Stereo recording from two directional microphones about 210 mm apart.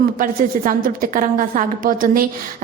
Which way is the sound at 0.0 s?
40° right (ahead or behind).